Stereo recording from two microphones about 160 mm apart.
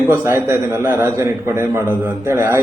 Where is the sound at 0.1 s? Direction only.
15° right (ahead or behind).